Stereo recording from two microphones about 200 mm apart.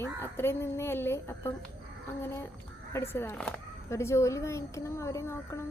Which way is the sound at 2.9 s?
10° left (ahead or behind).